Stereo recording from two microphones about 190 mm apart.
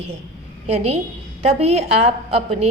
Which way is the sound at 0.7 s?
35° right (ahead or behind).